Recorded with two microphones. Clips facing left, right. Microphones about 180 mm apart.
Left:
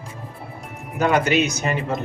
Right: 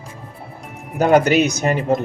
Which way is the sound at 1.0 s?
40° right (ahead or behind).